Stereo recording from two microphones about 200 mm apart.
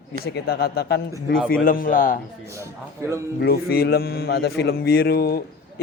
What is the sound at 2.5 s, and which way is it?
Speech, 15° right (ahead or behind).